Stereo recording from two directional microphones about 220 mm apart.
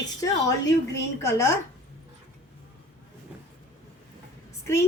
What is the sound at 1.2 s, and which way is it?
Speech, 15° left (ahead or behind).